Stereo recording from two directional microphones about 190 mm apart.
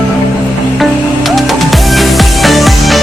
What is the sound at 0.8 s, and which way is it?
Music, centre (ahead or behind).